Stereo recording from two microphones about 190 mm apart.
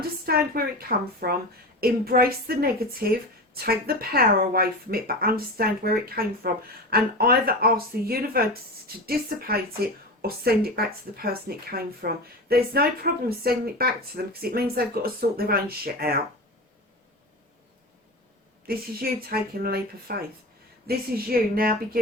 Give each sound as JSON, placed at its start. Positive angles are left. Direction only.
{"t": 0.3, "sound": "a woman's voice", "side_deg": -50}
{"t": 18.6, "sound": "a woman's voice", "side_deg": -50}